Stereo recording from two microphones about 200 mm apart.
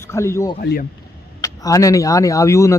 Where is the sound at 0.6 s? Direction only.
50° left (ahead or behind).